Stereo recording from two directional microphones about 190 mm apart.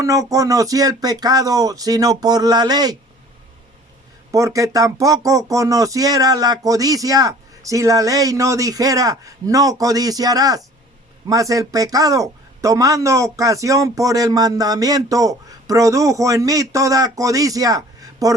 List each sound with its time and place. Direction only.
0.0 s speech: 15° right (ahead or behind)
4.3 s speech: 15° right (ahead or behind)